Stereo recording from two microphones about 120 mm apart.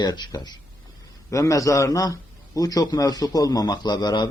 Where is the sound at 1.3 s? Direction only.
25° left (ahead or behind).